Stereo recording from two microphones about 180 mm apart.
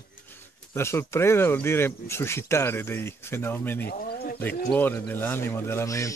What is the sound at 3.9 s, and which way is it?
Bird, 60° left (ahead or behind).